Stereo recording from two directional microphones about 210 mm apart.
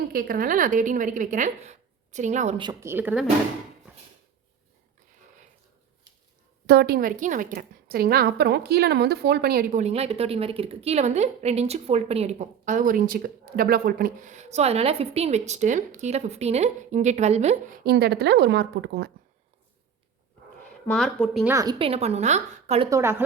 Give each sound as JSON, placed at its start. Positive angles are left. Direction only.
{"t": 0.1, "sound": "a woman's voice", "side_deg": -40}
{"t": 2.6, "sound": "speech", "side_deg": -15}
{"t": 6.7, "sound": "a woman's voice", "side_deg": -50}
{"t": 9.8, "sound": "a woman's voice", "side_deg": -30}
{"t": 17.8, "sound": "a woman's voice", "side_deg": -50}
{"t": 20.8, "sound": "speech", "side_deg": 0}
{"t": 21.5, "sound": "a woman's voice", "side_deg": -20}
{"t": 22.9, "sound": "speech", "side_deg": -10}